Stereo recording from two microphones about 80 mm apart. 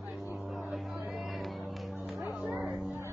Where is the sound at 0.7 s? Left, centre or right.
Centre.